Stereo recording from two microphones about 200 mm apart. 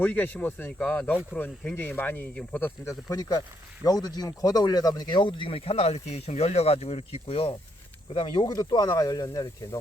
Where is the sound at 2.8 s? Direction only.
20° left (ahead or behind).